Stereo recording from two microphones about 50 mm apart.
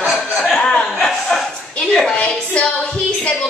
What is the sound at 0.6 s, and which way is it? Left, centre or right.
Chuckle, left.